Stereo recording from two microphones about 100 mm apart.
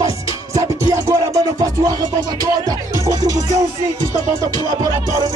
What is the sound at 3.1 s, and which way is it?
Music, 35° right (ahead or behind).